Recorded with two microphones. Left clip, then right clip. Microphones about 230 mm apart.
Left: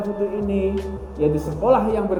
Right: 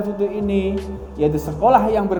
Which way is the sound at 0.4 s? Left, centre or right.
Right.